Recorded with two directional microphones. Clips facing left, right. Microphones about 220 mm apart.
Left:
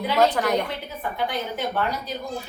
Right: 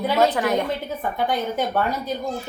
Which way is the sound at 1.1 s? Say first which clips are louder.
Right 4 dB; 45° right (ahead or behind).